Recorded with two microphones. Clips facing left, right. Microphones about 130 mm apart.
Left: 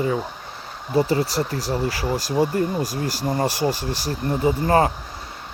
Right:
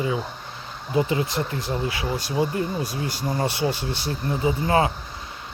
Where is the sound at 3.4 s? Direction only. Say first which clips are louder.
Left 2 dB; 40° left (ahead or behind).